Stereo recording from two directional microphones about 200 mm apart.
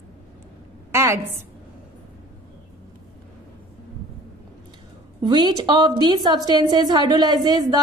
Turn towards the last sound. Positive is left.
turn(degrees=-20)  # may be behind; listen again after turning